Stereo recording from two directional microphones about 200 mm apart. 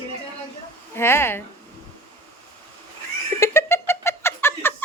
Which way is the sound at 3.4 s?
15° left (ahead or behind).